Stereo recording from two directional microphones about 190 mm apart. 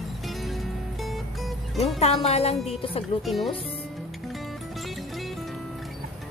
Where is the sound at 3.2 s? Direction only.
Centre (ahead or behind).